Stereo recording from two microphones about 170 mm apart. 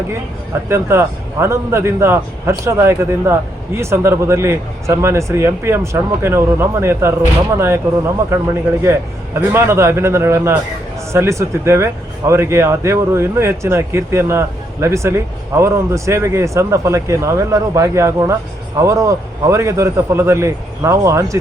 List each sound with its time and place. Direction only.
0.7 s a man's voice: 15° right (ahead or behind)